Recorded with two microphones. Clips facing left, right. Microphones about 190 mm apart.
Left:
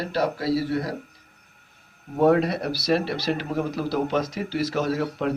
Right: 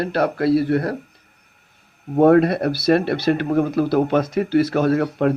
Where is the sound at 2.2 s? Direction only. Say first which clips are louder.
Right 6 dB; 55° right (ahead or behind).